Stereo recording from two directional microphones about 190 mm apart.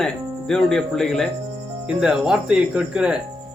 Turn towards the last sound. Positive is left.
turn(degrees=-5)  # may be behind; listen again after turning